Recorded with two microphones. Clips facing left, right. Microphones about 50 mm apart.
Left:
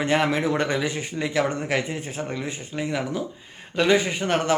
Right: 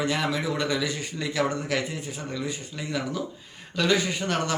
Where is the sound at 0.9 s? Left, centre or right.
Left.